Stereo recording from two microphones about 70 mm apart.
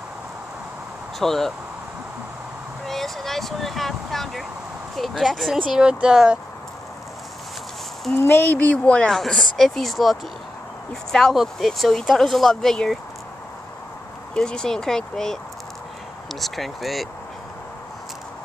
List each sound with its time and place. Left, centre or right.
1.2 s speech: centre
2.9 s speech: centre
8.3 s speech: left
8.7 s speech: centre
9.1 s speech: centre
14.3 s speech: centre